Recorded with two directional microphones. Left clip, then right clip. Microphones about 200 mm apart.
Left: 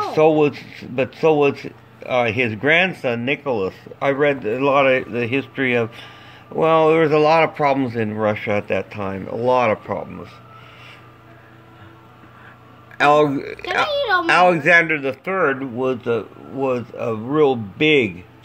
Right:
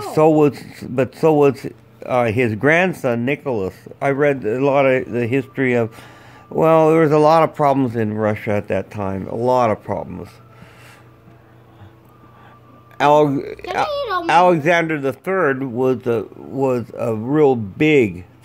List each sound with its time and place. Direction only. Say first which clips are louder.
0.0 s a man's voice: right 1 dB; 40° right (ahead or behind)
12.9 s speech: right 1 dB; 30° right (ahead or behind)
14.2 s a man's voice: right 3 dB; 30° right (ahead or behind)